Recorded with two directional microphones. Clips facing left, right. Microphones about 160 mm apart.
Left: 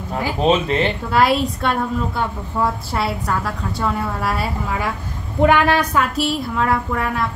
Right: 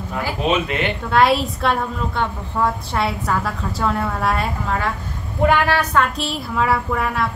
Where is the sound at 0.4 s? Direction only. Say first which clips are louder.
Left 4 dB; 30° left (ahead or behind).